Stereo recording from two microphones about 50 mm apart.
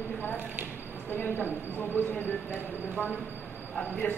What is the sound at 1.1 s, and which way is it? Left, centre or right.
Speech, left.